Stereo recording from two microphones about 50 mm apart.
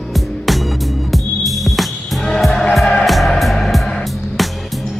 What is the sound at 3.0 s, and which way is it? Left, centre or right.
Music, centre.